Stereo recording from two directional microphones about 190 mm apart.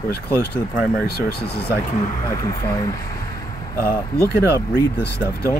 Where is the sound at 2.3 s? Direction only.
15° left (ahead or behind).